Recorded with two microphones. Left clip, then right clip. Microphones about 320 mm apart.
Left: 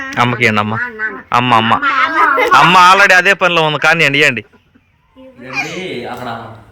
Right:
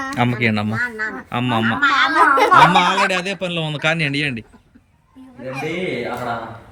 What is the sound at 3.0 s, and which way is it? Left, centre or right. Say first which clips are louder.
Speech: left 12 dB; centre.